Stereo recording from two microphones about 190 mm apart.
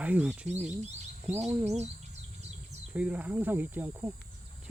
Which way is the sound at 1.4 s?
35° right (ahead or behind).